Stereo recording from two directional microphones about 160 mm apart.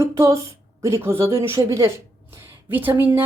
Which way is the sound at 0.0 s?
20° right (ahead or behind).